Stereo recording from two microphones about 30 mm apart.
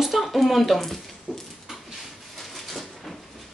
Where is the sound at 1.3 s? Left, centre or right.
Centre.